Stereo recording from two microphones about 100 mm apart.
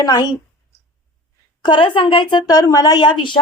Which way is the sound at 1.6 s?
55° left (ahead or behind).